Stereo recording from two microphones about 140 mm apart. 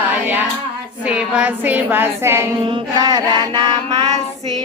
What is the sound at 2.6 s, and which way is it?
Music, 30° right (ahead or behind).